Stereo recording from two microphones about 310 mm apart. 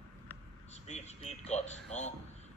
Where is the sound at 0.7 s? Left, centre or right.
Left.